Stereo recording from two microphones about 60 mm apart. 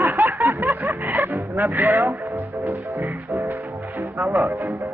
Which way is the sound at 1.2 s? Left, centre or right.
Right.